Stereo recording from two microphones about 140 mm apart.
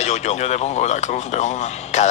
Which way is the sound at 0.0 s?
55° left (ahead or behind).